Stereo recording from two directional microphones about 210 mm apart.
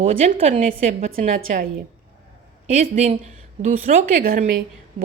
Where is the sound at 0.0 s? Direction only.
30° right (ahead or behind).